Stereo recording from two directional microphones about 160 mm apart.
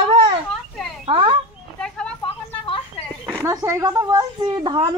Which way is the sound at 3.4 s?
20° right (ahead or behind).